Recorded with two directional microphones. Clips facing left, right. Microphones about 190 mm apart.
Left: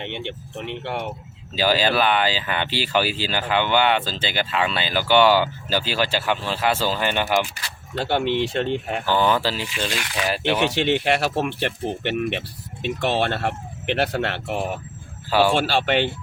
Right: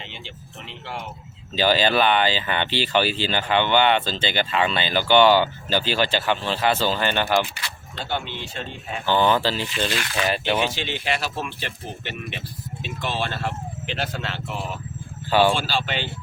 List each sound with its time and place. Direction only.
0.0 s speech: 60° left (ahead or behind)
1.5 s speech: 5° left (ahead or behind)
8.0 s speech: 65° left (ahead or behind)
9.0 s speech: 5° left (ahead or behind)
10.6 s speech: 65° left (ahead or behind)
15.3 s speech: 5° left (ahead or behind)
15.5 s speech: 65° left (ahead or behind)